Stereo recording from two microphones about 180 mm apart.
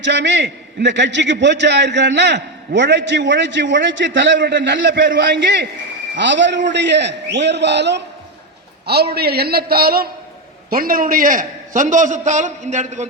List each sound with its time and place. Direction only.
0.0 s a man's voice: 80° right; by 13.1 s 40° right (ahead or behind)